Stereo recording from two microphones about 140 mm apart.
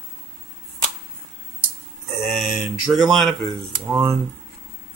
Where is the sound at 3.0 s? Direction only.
25° right (ahead or behind).